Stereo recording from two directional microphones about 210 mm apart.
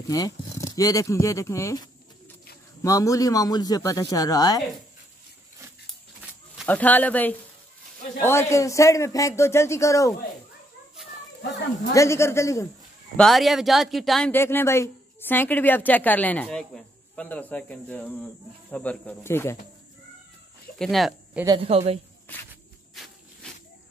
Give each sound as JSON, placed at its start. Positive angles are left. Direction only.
{"t": 0.1, "sound": "a sound", "side_deg": 15}
{"t": 0.7, "sound": "speech", "side_deg": 15}
{"t": 6.6, "sound": "speech", "side_deg": 5}
{"t": 11.9, "sound": "speech", "side_deg": 15}
{"t": 13.1, "sound": "speech", "side_deg": 0}
{"t": 20.8, "sound": "speech", "side_deg": 0}
{"t": 21.5, "sound": "speech", "side_deg": -25}
{"t": 22.3, "sound": "a sound", "side_deg": 10}